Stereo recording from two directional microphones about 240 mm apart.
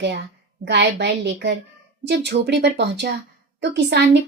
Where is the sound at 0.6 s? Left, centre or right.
Right.